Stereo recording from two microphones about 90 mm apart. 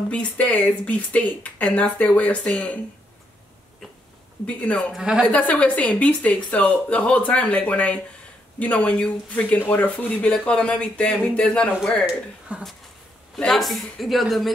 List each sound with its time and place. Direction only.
0.1 s a woman's voice: 15° left (ahead or behind)
4.5 s a woman's voice: 15° left (ahead or behind)
4.9 s a woman's voice: 10° right (ahead or behind)
5.2 s a woman's voice: 15° left (ahead or behind)
12.5 s a woman's voice: 15° right (ahead or behind)
13.4 s a woman's voice: centre (ahead or behind)